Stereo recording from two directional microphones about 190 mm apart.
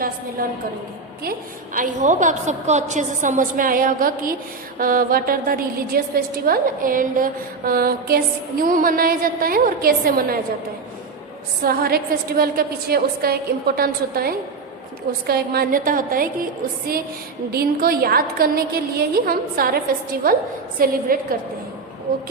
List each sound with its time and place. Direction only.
1.7 s a woman's voice: 45° right (ahead or behind)
11.6 s a woman's voice: 50° right (ahead or behind)
17.5 s a woman's voice: 50° right (ahead or behind)